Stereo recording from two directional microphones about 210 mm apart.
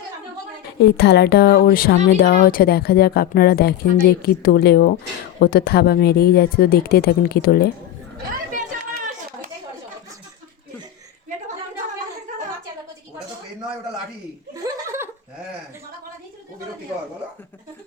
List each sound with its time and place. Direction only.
0.9 s speech: 55° left (ahead or behind)
8.3 s chatter: 40° right (ahead or behind)
14.5 s laughter: 15° right (ahead or behind)